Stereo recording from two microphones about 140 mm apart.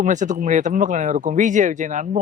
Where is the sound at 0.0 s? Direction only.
60° right (ahead or behind).